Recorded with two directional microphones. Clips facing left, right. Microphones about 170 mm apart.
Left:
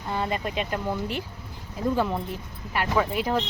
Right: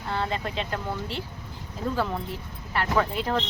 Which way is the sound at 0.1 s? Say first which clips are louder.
Left 1 dB; 15° left (ahead or behind).